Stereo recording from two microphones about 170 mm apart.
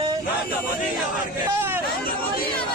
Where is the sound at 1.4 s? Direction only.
15° right (ahead or behind).